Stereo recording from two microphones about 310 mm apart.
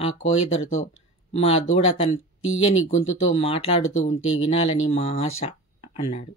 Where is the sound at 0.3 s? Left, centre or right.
Centre.